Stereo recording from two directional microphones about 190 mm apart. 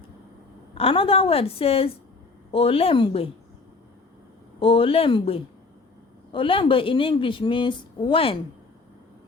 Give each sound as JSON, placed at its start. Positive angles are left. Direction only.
{"t": 0.8, "sound": "a woman's voice", "side_deg": 30}
{"t": 4.6, "sound": "a woman's voice", "side_deg": 30}